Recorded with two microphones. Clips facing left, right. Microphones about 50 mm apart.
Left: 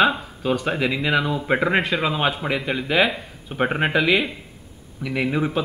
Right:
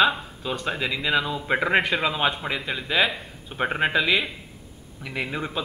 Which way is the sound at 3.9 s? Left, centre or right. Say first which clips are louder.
Left 3 dB; centre.